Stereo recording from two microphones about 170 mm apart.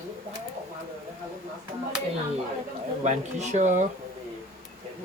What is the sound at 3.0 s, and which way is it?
Speech, 45° right (ahead or behind).